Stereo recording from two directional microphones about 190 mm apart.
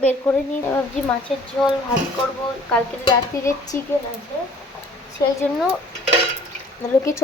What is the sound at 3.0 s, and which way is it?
Speech, 20° left (ahead or behind).